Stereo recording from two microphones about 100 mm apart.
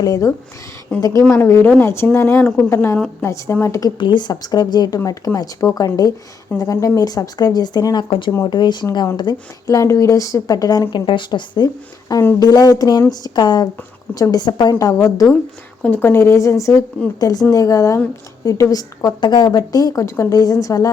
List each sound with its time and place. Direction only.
0.0 s a woman's voice: 35° left (ahead or behind)
0.9 s speech: 10° left (ahead or behind)
1.3 s a woman's voice: 25° left (ahead or behind)
3.9 s a woman's voice: 50° left (ahead or behind)
9.7 s a woman's voice: 30° left (ahead or behind)
11.0 s a woman's voice: 55° left (ahead or behind); by 15.4 s 35° left (ahead or behind)
15.8 s a woman's voice: 15° left (ahead or behind); by 20.9 s 35° left (ahead or behind)